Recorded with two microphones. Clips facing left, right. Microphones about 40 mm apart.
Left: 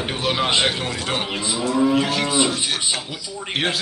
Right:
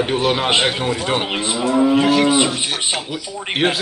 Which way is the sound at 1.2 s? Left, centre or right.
Right.